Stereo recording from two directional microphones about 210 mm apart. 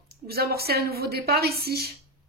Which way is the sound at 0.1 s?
45° right (ahead or behind).